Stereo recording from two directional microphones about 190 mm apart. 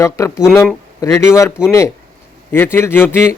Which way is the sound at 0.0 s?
15° left (ahead or behind).